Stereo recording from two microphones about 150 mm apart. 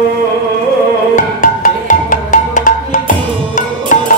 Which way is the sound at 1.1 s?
60° left (ahead or behind).